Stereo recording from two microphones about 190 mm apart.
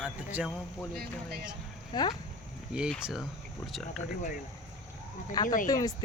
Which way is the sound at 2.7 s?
5° right (ahead or behind).